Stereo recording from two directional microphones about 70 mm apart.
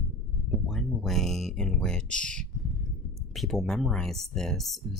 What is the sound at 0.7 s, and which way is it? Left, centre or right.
Speech, centre.